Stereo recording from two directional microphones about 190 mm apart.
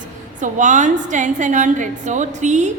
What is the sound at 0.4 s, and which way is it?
A woman's voice, 40° right (ahead or behind).